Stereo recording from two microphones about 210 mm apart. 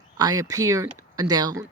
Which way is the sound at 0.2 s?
15° right (ahead or behind).